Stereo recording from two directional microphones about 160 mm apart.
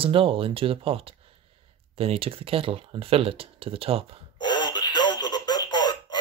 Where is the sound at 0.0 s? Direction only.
35° right (ahead or behind).